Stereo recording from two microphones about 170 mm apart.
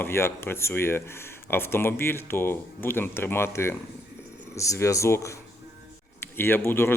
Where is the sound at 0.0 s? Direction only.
15° left (ahead or behind).